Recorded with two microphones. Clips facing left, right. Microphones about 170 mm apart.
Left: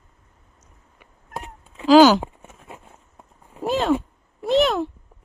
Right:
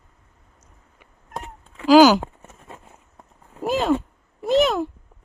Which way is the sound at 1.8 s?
5° right (ahead or behind).